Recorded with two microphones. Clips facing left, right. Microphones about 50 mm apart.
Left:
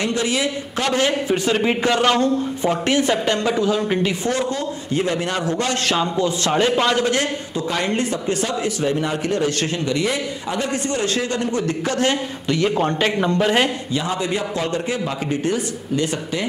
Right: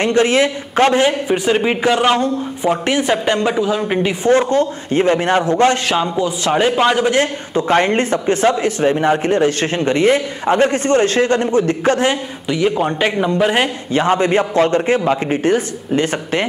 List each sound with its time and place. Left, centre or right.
0.0 s speech: right
0.9 s a man's voice: right
4.3 s speech: right
5.9 s a man's voice: centre
7.2 s speech: right
12.0 s speech: centre
13.9 s speech: right